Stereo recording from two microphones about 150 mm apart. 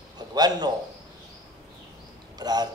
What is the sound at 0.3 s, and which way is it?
Speech, 25° right (ahead or behind).